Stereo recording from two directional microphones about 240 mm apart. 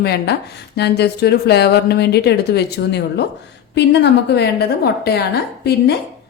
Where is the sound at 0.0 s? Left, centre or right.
Left.